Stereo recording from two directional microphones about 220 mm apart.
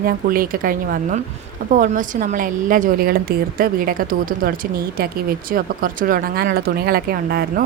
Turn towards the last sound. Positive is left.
turn(degrees=-45)  # may be behind; listen again after turning